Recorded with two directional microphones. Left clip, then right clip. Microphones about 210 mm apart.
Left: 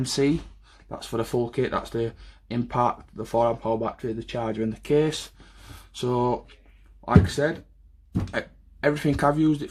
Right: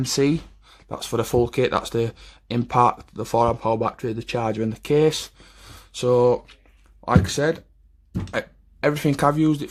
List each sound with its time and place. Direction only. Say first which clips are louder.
0.0 s speech: right 3 dB; 25° right (ahead or behind)